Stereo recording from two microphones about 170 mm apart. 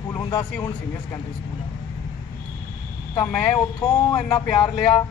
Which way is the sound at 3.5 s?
25° left (ahead or behind).